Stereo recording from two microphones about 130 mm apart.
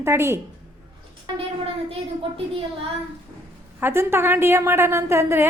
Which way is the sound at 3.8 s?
20° right (ahead or behind).